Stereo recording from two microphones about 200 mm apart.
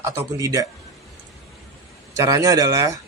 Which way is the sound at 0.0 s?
15° right (ahead or behind).